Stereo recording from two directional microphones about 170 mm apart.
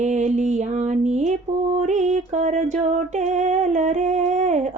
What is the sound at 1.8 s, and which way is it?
Music, 45° right (ahead or behind).